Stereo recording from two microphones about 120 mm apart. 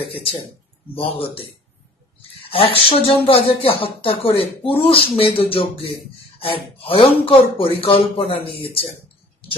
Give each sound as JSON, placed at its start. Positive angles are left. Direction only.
{"t": 0.0, "sound": "speech", "side_deg": 50}
{"t": 2.5, "sound": "speech", "side_deg": 50}